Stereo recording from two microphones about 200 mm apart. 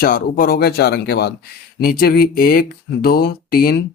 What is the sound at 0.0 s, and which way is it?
Speech, 45° left (ahead or behind).